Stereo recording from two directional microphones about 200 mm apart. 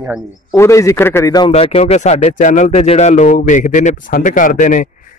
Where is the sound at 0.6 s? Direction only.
15° left (ahead or behind).